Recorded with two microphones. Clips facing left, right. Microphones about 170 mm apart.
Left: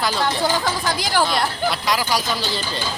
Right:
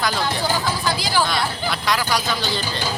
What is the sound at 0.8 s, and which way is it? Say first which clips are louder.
Speech: left 1 dB; 55° left (ahead or behind).